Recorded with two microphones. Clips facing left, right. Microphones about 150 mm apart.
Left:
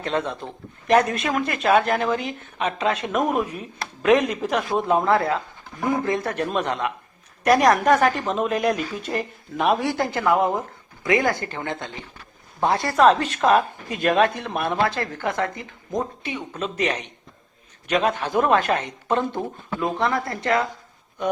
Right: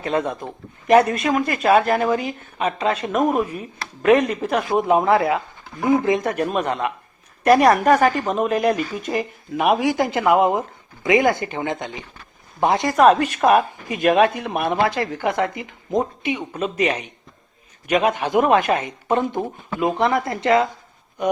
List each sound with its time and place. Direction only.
0.0 s speech: 10° right (ahead or behind)
6.4 s speech: 5° right (ahead or behind); by 20.7 s 20° right (ahead or behind)